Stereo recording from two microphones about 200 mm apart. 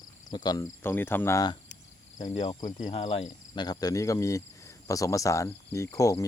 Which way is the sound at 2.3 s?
25° left (ahead or behind).